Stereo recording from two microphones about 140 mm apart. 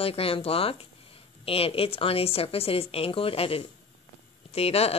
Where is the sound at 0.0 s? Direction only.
45° left (ahead or behind).